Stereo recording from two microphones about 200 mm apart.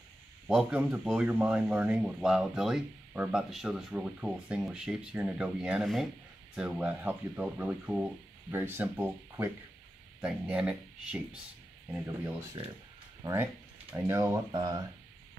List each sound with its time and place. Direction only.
0.5 s speech: 5° right (ahead or behind)
13.2 s speech: 15° right (ahead or behind)